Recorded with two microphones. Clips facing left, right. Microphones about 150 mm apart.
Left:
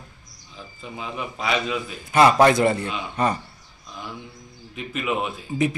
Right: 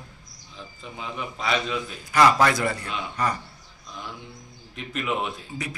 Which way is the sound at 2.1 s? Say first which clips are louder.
Left 4 dB; 25° left (ahead or behind).